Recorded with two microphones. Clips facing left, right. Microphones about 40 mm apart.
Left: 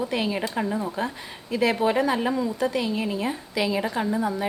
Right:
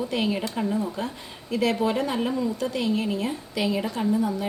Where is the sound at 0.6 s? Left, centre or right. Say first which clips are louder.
Left 2 dB; left.